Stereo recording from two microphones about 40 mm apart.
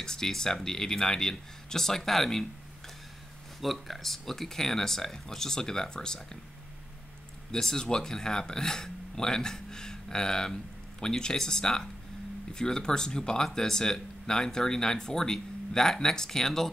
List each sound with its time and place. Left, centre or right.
0.0 s speech: centre
3.6 s speech: centre
7.5 s speech: centre